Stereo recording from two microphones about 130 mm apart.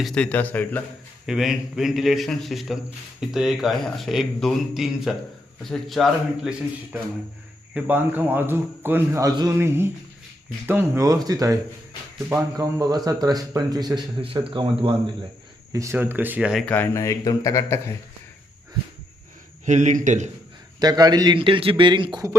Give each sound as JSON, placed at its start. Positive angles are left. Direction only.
{"t": 0.0, "sound": "a man's voice", "side_deg": 5}
{"t": 1.3, "sound": "a man's voice", "side_deg": -5}
{"t": 15.7, "sound": "a man's voice", "side_deg": -20}
{"t": 16.6, "sound": "speech", "side_deg": 15}
{"t": 19.6, "sound": "a man's voice", "side_deg": -65}
{"t": 20.7, "sound": "a man's voice", "side_deg": -30}